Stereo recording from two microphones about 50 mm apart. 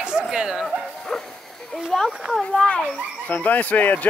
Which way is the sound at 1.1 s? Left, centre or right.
Centre.